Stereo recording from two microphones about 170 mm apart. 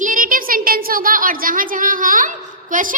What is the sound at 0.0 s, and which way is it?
A woman's voice, 50° right (ahead or behind).